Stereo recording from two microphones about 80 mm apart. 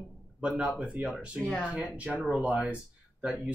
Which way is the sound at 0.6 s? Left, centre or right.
Centre.